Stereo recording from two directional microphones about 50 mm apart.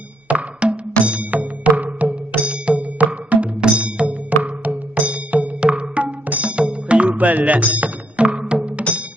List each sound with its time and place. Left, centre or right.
0.3 s music: right
7.1 s music: right